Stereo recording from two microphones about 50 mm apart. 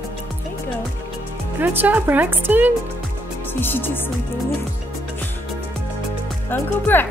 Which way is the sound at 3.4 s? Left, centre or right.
Left.